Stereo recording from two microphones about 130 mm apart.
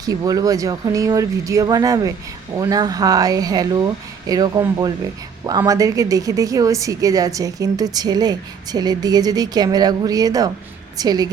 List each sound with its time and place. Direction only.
0.0 s a woman's voice: 30° right (ahead or behind)